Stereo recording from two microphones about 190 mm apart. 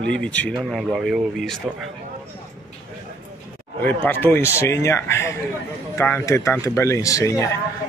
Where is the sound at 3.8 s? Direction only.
10° left (ahead or behind).